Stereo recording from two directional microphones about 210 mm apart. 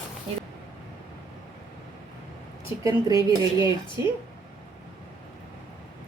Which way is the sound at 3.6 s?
20° left (ahead or behind).